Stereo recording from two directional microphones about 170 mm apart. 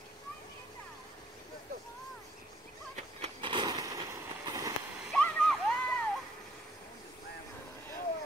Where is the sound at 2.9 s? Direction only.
35° right (ahead or behind).